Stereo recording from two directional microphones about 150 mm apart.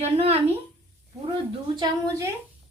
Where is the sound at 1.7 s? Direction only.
30° right (ahead or behind).